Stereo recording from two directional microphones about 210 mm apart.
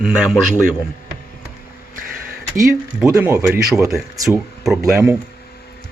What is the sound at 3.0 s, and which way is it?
Speech, 10° right (ahead or behind).